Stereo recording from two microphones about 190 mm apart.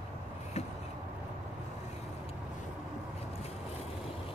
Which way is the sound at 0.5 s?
35° left (ahead or behind).